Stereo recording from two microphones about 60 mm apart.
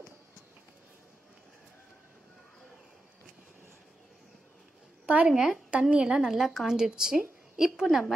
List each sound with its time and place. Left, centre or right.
5.0 s a sound: right
5.3 s speech: centre
5.7 s speech: centre